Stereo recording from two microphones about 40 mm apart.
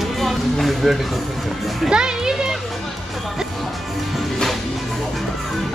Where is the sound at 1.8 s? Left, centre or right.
Centre.